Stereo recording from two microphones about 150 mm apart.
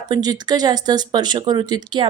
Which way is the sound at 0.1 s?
25° right (ahead or behind).